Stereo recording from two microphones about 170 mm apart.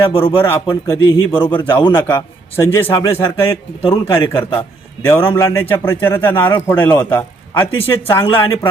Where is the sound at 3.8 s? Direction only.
30° left (ahead or behind).